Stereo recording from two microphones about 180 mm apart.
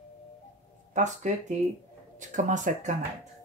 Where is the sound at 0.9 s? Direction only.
40° right (ahead or behind).